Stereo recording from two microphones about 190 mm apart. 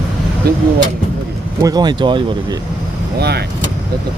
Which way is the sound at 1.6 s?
20° right (ahead or behind).